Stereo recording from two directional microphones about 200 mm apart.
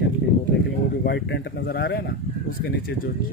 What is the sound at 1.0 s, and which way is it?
Speech, 55° left (ahead or behind).